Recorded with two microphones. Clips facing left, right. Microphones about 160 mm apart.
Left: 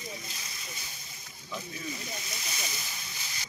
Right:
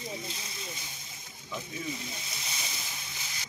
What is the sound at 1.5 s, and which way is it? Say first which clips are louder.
Speech: right 1 dB; 20° right (ahead or behind).